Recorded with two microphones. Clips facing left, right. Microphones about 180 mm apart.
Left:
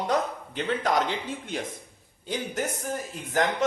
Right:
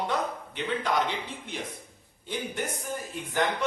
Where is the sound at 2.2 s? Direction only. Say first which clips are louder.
Left 3 dB; 40° left (ahead or behind).